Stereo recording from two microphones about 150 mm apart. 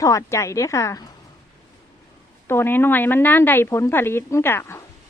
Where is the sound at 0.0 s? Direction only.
20° left (ahead or behind).